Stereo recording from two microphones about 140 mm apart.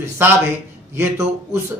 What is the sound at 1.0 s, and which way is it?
Speech, 20° right (ahead or behind).